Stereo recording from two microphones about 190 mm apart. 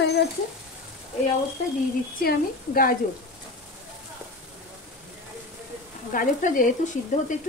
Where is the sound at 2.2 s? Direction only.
50° left (ahead or behind).